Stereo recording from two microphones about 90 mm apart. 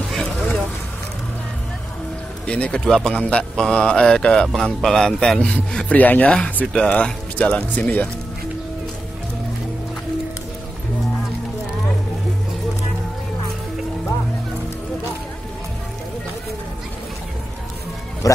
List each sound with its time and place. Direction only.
2.4 s speech: 10° left (ahead or behind)
18.2 s speech: 40° left (ahead or behind)